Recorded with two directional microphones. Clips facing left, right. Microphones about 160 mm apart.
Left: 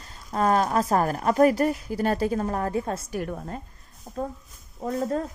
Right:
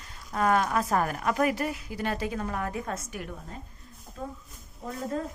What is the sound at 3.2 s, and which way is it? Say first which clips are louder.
Speech: left 8 dB; 55° left (ahead or behind).